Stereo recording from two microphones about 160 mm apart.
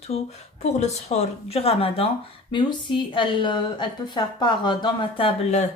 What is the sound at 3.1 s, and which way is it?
A woman's voice, 30° left (ahead or behind).